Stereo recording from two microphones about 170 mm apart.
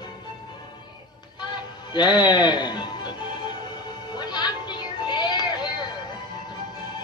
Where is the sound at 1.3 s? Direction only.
25° left (ahead or behind).